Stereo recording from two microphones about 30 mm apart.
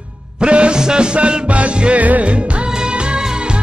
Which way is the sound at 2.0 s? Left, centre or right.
Right.